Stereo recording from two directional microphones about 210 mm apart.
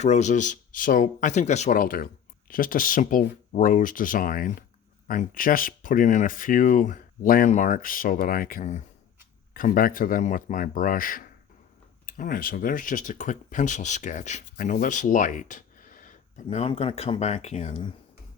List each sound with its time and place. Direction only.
0.0 s speech: 35° left (ahead or behind)